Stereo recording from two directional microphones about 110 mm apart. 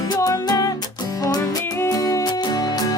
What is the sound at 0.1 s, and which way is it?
Music, 35° left (ahead or behind).